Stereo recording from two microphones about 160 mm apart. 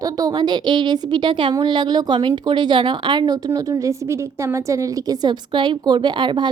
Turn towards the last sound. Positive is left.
turn(degrees=-30)  # may be behind; listen again after turning